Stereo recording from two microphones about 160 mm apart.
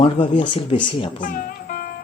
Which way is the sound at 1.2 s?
60° left (ahead or behind).